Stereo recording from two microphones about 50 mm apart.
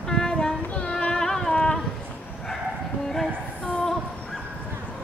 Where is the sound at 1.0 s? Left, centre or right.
Centre.